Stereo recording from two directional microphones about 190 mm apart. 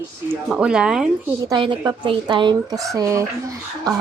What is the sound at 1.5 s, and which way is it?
Speech, 20° right (ahead or behind).